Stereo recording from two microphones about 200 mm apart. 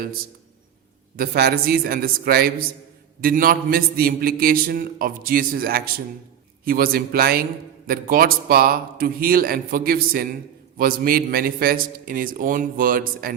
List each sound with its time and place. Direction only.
1.1 s a man's voice: 50° right (ahead or behind)